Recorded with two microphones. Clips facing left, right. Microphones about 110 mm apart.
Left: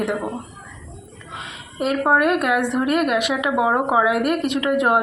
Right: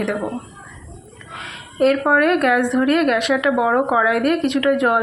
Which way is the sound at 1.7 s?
15° left (ahead or behind).